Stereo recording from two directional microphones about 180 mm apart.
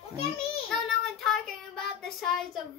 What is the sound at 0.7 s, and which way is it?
Child singing, centre (ahead or behind).